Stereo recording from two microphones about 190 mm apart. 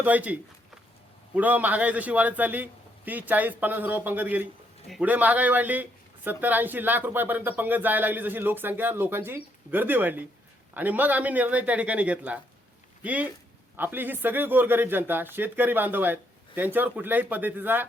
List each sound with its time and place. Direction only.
0.0 s speech: 10° right (ahead or behind)
1.4 s speech: 10° right (ahead or behind)